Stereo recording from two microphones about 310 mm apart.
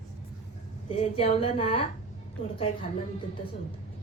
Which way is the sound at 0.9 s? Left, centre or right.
Centre.